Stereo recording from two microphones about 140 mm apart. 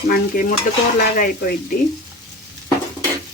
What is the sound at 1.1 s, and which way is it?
Speech, 75° left (ahead or behind).